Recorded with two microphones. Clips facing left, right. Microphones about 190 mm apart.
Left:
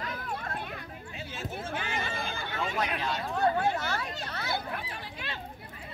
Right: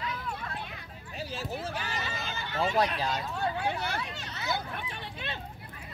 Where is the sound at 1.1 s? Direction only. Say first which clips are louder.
Right 3 dB; 35° right (ahead or behind).